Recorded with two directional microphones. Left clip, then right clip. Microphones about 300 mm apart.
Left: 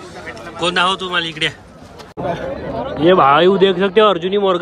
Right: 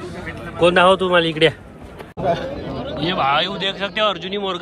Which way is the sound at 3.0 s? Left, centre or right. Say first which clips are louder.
Left 8 dB; centre.